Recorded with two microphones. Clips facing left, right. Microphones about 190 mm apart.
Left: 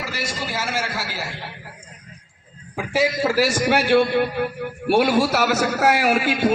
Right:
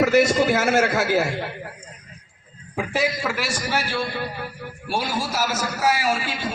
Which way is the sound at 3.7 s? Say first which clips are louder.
Left 10 dB; 60° left (ahead or behind).